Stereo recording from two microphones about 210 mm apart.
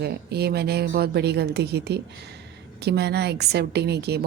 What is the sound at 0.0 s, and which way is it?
A woman's voice, 50° right (ahead or behind).